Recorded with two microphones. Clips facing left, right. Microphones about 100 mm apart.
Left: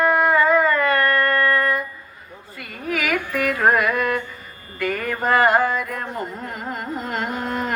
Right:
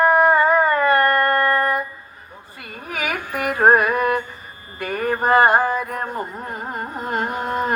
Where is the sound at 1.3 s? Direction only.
35° right (ahead or behind).